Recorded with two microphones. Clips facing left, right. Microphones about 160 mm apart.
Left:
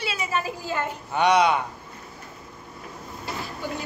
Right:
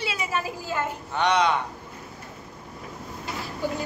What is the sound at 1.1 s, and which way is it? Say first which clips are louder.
Speech: left 3 dB; 10° left (ahead or behind).